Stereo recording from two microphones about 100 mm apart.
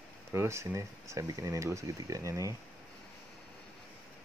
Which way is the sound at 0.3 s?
25° right (ahead or behind).